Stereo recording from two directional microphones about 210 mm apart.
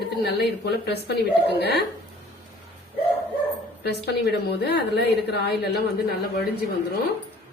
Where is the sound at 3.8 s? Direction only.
50° left (ahead or behind).